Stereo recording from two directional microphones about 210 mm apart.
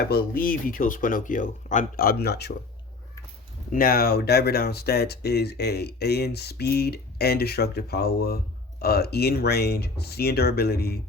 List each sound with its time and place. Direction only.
0.0 s speech: 45° left (ahead or behind)
3.7 s speech: 45° left (ahead or behind)